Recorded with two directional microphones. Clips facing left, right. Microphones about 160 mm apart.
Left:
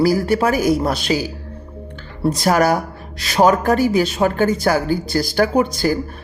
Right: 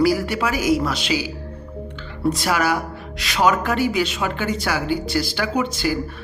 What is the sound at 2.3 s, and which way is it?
A woman's voice, 40° left (ahead or behind).